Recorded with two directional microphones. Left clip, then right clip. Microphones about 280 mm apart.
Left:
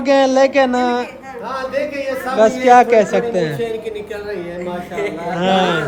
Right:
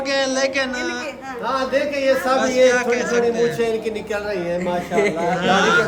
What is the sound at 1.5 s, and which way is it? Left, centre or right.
Speech, right.